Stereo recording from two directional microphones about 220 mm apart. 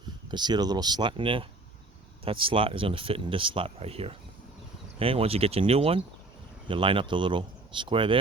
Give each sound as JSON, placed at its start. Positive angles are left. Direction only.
{"t": 0.3, "sound": "speech", "side_deg": -20}